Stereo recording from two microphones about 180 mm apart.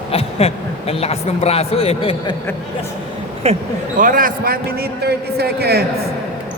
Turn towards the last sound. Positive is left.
turn(degrees=-60)  # may be behind; listen again after turning